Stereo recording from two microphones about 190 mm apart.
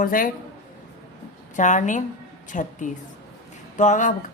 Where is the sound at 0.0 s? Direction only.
45° left (ahead or behind).